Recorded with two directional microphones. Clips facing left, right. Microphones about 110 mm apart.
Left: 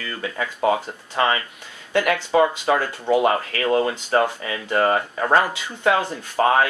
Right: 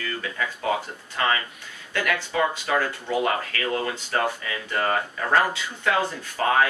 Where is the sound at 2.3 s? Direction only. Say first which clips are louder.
Left 6 dB; 25° left (ahead or behind).